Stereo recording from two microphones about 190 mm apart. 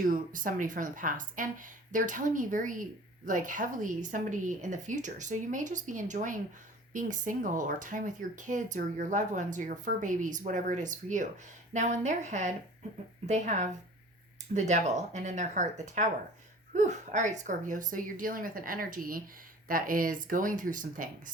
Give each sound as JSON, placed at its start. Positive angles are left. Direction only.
{"t": 0.0, "sound": "speech", "side_deg": -45}